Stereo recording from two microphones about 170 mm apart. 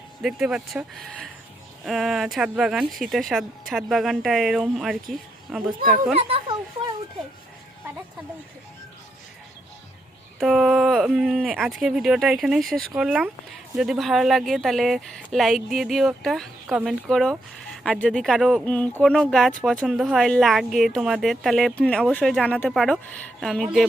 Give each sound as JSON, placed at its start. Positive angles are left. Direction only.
{"t": 0.2, "sound": "speech", "side_deg": -5}
{"t": 6.1, "sound": "a child's voice", "side_deg": -35}
{"t": 10.4, "sound": "speech", "side_deg": -5}